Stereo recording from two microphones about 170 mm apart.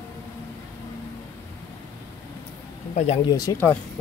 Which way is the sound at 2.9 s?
40° left (ahead or behind).